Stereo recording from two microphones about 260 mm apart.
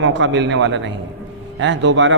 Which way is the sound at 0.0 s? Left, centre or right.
Right.